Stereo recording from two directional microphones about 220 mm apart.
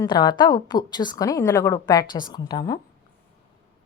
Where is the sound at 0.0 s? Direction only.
20° left (ahead or behind).